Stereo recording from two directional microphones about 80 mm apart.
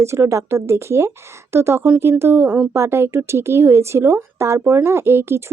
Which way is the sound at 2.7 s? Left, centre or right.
Right.